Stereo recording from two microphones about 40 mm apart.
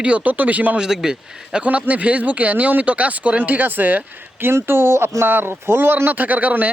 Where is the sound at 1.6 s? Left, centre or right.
Right.